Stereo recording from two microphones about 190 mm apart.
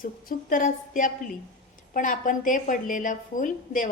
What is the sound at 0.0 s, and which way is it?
A woman's voice, 45° left (ahead or behind).